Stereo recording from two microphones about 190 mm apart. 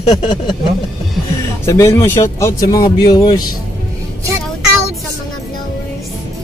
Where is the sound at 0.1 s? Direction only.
20° left (ahead or behind).